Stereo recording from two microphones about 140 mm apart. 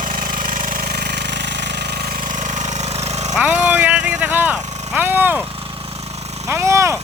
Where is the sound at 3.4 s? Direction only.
10° right (ahead or behind).